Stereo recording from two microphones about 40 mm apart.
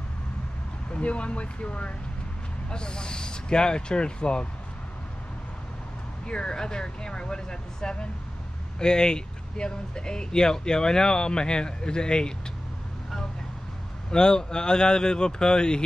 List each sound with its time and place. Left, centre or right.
0.9 s speech: left
6.2 s speech: left
14.1 s speech: centre